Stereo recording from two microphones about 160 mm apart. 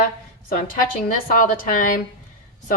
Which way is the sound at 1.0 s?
60° left (ahead or behind).